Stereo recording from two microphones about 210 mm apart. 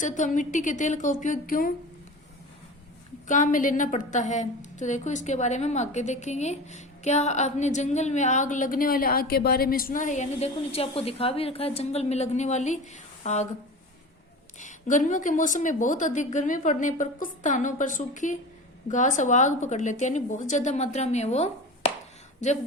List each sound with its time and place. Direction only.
0.0 s a woman's voice: 35° left (ahead or behind)
3.2 s a woman's voice: 40° left (ahead or behind)
14.6 s a woman's voice: 35° left (ahead or behind)